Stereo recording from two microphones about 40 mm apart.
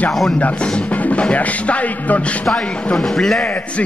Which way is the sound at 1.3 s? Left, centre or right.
Left.